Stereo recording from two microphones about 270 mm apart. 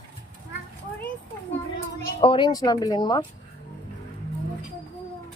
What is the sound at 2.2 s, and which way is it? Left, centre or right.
Speech, centre.